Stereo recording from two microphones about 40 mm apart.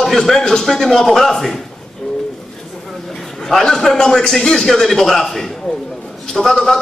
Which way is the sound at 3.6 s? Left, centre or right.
Centre.